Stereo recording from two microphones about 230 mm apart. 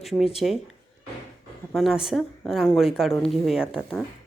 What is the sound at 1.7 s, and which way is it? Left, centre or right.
A woman's voice, centre.